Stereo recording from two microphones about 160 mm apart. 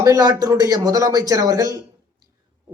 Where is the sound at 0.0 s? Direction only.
20° right (ahead or behind).